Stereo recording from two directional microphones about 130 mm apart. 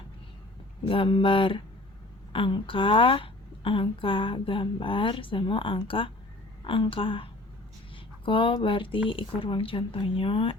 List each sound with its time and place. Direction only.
0.9 s a woman's voice: 40° left (ahead or behind)